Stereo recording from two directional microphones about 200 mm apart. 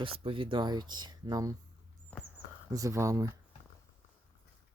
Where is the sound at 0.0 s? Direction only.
30° right (ahead or behind).